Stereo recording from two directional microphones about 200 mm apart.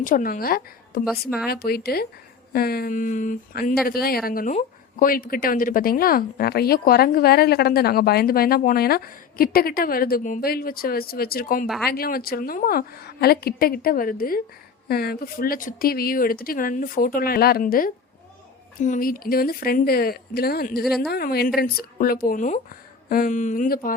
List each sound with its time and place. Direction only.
0.0 s speech: 45° left (ahead or behind)
11.6 s speech: centre (ahead or behind)
11.9 s speech: 50° left (ahead or behind)
20.8 s speech: centre (ahead or behind)
21.1 s speech: 50° left (ahead or behind)